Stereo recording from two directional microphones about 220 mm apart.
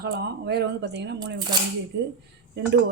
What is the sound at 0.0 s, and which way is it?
Speech, 45° right (ahead or behind).